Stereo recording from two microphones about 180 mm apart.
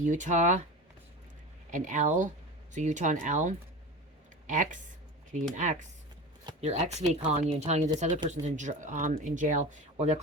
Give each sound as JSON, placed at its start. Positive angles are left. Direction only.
{"t": 0.0, "sound": "speech", "side_deg": -45}
{"t": 1.7, "sound": "speech", "side_deg": -45}
{"t": 6.6, "sound": "speech", "side_deg": -40}